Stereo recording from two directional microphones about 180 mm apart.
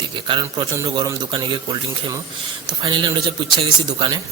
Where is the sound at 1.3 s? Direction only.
25° right (ahead or behind).